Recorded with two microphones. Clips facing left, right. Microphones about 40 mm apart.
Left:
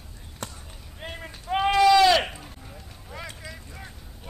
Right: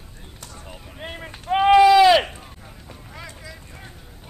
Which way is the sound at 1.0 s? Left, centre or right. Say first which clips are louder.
Right 3 dB; centre.